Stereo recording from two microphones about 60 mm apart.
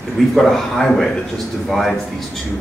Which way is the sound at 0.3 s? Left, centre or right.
Centre.